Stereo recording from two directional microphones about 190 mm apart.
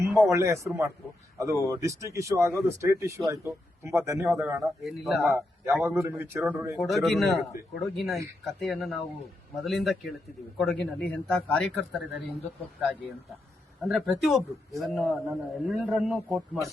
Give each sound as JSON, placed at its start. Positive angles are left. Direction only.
{"t": 0.3, "sound": "speech", "side_deg": -15}
{"t": 4.6, "sound": "a man's voice", "side_deg": 0}
{"t": 5.3, "sound": "a man's voice", "side_deg": -10}
{"t": 13.8, "sound": "a man's voice", "side_deg": 0}